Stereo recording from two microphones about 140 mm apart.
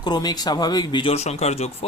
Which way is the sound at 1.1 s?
50° left (ahead or behind).